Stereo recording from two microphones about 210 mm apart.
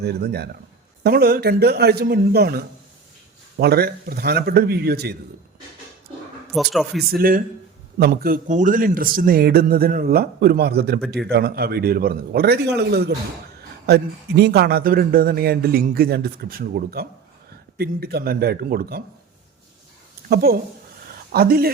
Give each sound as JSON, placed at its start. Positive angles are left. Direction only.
{"t": 0.0, "sound": "a man's voice", "side_deg": -50}
{"t": 6.5, "sound": "speech", "side_deg": 0}
{"t": 7.1, "sound": "a man's voice", "side_deg": -45}
{"t": 20.3, "sound": "a man's voice", "side_deg": -50}